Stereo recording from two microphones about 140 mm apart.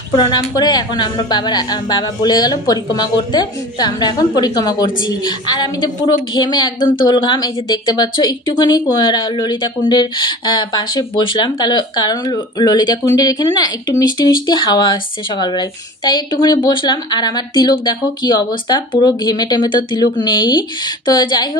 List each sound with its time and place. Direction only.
0.1 s a woman's voice: 30° left (ahead or behind)